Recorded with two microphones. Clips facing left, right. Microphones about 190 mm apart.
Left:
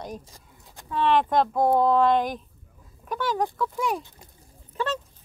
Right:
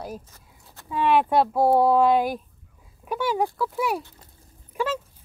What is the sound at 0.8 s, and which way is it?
Speech, 10° right (ahead or behind).